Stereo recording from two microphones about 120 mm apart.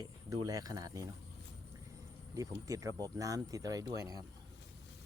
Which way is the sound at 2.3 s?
30° right (ahead or behind).